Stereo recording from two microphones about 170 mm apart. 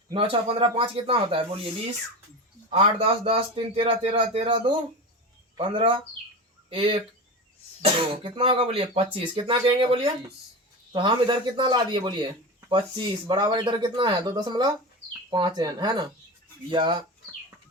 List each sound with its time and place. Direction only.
0.1 s speech: 30° right (ahead or behind)
2.7 s speech: 35° right (ahead or behind)